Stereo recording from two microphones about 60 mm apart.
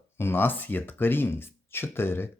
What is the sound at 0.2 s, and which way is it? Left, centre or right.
Speech, left.